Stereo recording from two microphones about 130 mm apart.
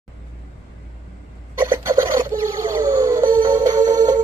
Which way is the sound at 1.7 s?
20° right (ahead or behind).